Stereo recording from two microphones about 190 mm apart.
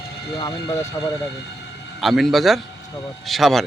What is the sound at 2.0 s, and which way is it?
A man's voice, centre (ahead or behind).